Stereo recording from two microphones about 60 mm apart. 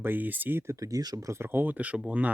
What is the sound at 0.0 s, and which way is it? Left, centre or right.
Speech, right.